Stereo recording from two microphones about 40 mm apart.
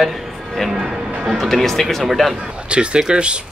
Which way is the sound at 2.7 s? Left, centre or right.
Right.